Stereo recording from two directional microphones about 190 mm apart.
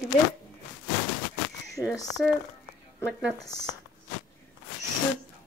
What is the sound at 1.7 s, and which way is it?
Speech, 15° left (ahead or behind).